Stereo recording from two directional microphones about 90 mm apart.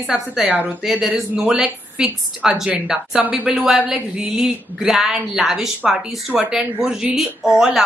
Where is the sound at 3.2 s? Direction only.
15° right (ahead or behind).